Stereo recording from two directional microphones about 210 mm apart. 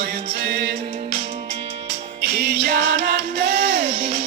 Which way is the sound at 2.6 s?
45° right (ahead or behind).